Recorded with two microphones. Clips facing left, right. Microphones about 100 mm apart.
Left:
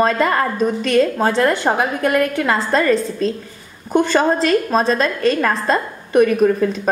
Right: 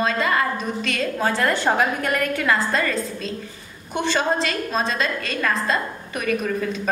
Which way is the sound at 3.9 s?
45° left (ahead or behind).